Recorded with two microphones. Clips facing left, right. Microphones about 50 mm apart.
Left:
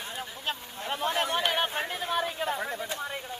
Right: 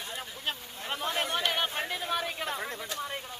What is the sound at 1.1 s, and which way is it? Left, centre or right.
Chatter, left.